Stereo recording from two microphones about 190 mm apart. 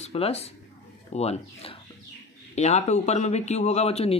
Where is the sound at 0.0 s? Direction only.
35° left (ahead or behind).